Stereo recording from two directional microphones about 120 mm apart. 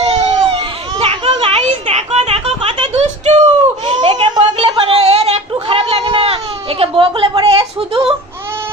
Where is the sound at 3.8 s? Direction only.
45° right (ahead or behind).